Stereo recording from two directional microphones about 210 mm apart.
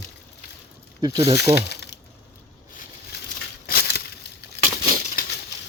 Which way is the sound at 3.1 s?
50° left (ahead or behind).